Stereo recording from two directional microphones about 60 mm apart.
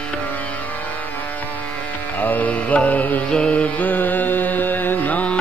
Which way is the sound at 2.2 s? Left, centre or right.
Left.